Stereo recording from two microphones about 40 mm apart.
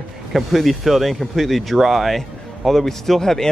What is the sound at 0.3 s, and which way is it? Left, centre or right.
Speech, centre.